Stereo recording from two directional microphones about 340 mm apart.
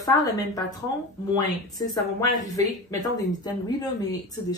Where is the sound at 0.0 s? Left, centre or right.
Centre.